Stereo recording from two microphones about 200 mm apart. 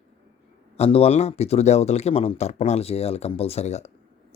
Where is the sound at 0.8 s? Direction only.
30° left (ahead or behind).